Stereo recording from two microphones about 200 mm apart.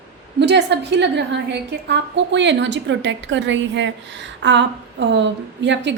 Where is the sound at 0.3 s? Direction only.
60° right (ahead or behind).